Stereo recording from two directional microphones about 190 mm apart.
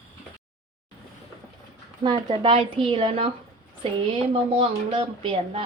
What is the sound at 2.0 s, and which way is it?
Speech, 25° right (ahead or behind).